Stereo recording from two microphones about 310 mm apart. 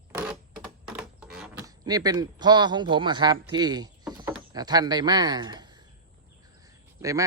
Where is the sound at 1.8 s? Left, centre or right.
Centre.